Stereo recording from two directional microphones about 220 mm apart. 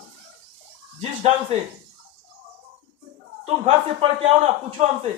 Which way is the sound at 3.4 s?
30° right (ahead or behind).